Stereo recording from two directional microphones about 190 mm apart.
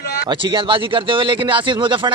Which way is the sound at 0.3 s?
25° right (ahead or behind).